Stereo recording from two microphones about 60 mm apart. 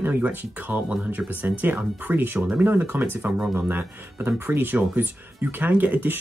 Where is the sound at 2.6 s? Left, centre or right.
Right.